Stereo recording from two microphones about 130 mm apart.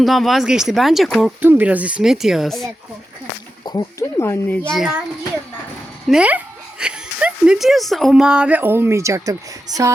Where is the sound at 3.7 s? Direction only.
25° left (ahead or behind).